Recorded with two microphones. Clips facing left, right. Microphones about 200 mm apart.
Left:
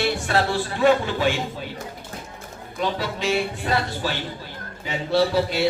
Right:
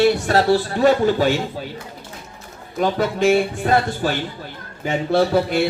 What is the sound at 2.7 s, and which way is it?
Speech, 50° right (ahead or behind).